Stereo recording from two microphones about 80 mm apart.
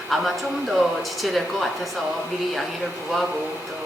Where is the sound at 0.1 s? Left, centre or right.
Centre.